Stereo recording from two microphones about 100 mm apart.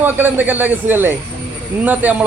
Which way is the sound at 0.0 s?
20° right (ahead or behind).